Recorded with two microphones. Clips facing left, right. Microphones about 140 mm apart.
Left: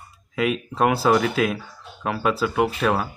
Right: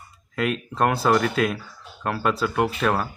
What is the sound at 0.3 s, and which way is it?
Speech, 5° left (ahead or behind).